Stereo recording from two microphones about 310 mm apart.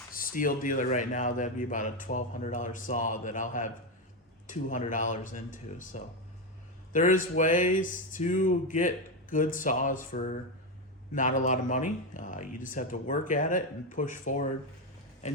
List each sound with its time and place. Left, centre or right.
0.1 s a man's voice: left